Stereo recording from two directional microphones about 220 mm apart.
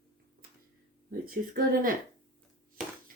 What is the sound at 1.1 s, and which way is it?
Speech, 40° right (ahead or behind).